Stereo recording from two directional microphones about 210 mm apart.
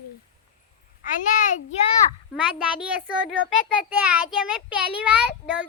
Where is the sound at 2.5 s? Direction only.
5° right (ahead or behind).